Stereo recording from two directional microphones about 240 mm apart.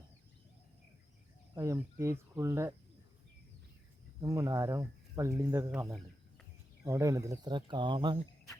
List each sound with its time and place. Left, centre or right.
1.5 s speech: centre
4.2 s speech: centre